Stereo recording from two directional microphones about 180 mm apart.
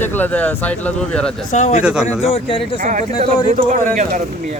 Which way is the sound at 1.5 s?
40° left (ahead or behind).